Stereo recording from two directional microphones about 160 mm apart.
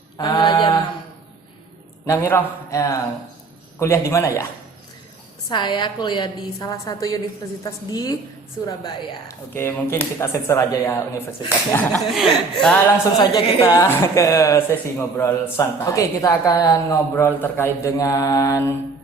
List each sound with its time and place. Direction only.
0.2 s mantra: 25° left (ahead or behind)
2.0 s a woman's voice: 15° left (ahead or behind)
5.5 s a woman's voice: 30° left (ahead or behind); by 12.0 s 10° left (ahead or behind)
12.1 s speech: centre (ahead or behind)
13.1 s a woman's voice: 25° left (ahead or behind)